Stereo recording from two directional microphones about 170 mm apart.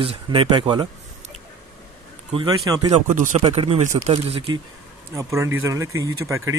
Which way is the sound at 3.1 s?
45° right (ahead or behind).